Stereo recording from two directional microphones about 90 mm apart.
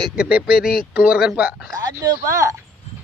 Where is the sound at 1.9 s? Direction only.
35° right (ahead or behind).